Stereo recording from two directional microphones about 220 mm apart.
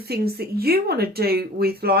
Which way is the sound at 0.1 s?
45° right (ahead or behind).